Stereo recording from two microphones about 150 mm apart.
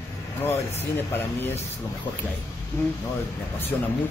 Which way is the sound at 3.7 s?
15° left (ahead or behind).